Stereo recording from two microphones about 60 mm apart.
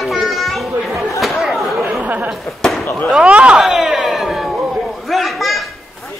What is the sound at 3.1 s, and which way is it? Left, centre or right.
Speech, centre.